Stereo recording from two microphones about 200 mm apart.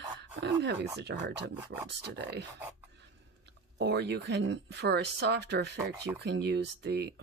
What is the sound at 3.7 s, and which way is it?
Speech, 55° right (ahead or behind).